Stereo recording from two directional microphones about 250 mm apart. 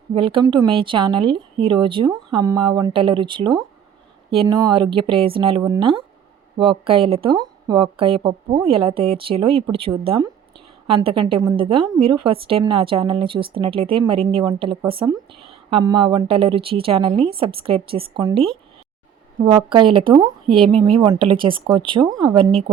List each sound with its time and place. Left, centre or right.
0.1 s a woman's voice: right